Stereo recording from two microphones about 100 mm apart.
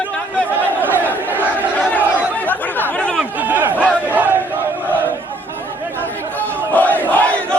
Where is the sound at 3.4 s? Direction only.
15° right (ahead or behind).